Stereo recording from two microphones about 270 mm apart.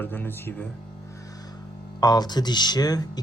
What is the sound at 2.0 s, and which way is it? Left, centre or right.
Speech, centre.